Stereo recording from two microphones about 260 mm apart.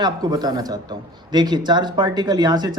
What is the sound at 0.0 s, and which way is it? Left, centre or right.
Speech, centre.